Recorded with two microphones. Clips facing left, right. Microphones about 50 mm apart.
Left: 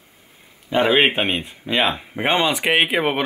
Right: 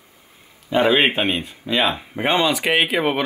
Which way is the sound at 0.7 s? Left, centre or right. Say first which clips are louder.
Even; centre.